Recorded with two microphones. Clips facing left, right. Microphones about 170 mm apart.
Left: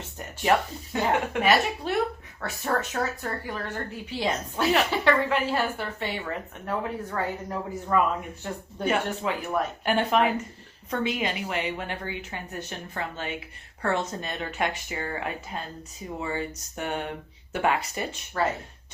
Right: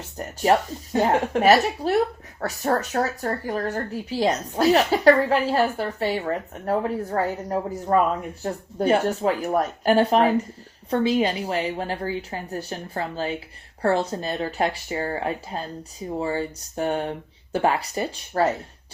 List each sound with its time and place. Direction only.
0.2 s speech: 40° right (ahead or behind)